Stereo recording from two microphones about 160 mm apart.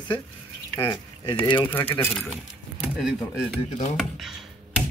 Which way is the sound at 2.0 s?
5° left (ahead or behind).